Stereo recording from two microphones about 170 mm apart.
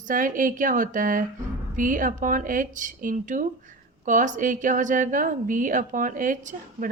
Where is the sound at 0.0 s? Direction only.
50° right (ahead or behind).